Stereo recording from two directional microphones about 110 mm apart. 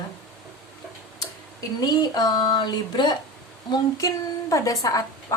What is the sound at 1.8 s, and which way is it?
A woman's voice, 40° left (ahead or behind).